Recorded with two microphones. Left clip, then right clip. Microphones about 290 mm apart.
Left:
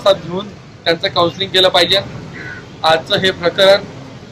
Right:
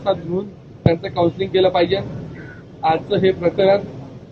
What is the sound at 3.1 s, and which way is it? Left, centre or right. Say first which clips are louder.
Speech: left 3 dB; centre.